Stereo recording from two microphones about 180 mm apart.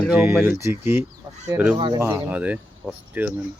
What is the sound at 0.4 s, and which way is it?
Speech, 15° right (ahead or behind).